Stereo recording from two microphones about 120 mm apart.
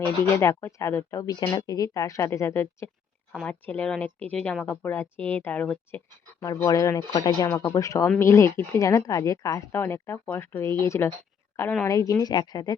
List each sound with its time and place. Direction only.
0.0 s a woman's voice: 25° left (ahead or behind)
6.4 s a woman's voice: 30° left (ahead or behind)